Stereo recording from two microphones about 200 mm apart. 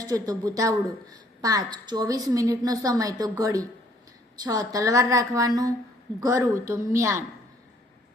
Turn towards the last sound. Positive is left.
turn(degrees=-15)  # may be behind; listen again after turning